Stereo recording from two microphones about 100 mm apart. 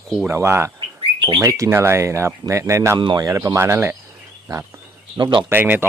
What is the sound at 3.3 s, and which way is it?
Speech, 30° right (ahead or behind).